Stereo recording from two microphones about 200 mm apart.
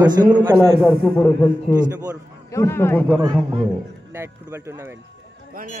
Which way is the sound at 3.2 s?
20° right (ahead or behind).